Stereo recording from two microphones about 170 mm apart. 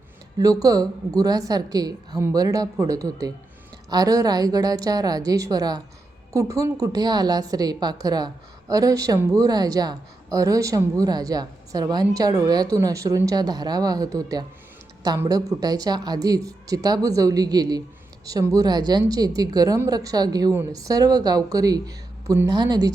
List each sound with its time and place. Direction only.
0.3 s a woman's voice: 20° right (ahead or behind)